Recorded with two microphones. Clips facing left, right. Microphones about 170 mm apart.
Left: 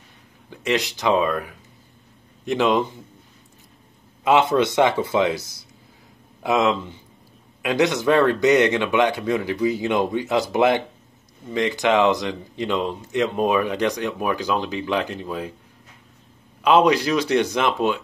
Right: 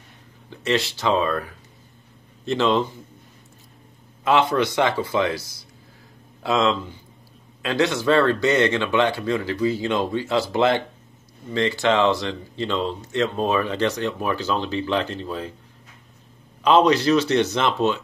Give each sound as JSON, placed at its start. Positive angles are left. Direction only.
{"t": 0.5, "sound": "speech", "side_deg": 15}
{"t": 4.2, "sound": "speech", "side_deg": 20}
{"t": 16.6, "sound": "speech", "side_deg": 10}